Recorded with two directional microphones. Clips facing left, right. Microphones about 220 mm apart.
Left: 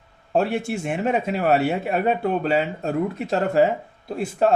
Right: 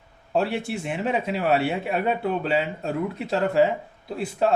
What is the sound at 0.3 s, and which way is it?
A man's voice, 45° left (ahead or behind).